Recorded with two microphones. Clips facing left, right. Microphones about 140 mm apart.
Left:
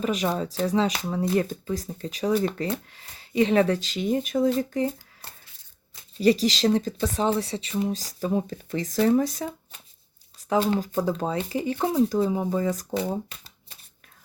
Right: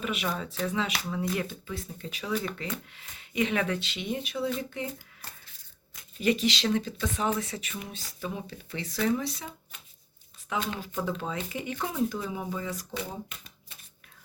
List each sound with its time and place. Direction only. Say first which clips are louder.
0.0 s speech: left 7 dB; 35° left (ahead or behind)
6.1 s speech: left 6 dB; 35° left (ahead or behind)